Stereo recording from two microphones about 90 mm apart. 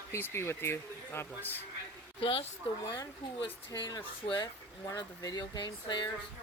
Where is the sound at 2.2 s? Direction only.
85° left.